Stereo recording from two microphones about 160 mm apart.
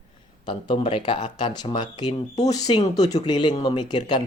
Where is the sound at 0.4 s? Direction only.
30° left (ahead or behind).